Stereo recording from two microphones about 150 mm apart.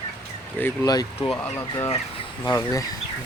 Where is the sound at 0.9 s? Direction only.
25° left (ahead or behind).